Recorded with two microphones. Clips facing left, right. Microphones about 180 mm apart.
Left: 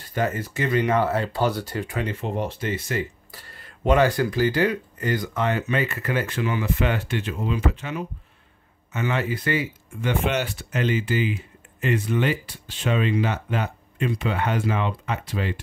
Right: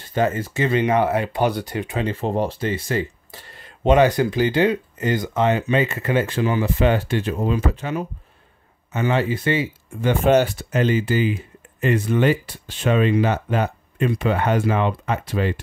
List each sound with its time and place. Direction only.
0.1 s speech: 25° right (ahead or behind)
10.0 s speech: 40° right (ahead or behind)